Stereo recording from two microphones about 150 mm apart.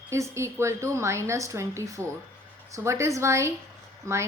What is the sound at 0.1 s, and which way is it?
A woman's voice, 20° right (ahead or behind).